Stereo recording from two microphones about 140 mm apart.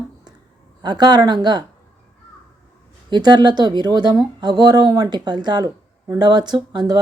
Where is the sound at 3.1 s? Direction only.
30° right (ahead or behind).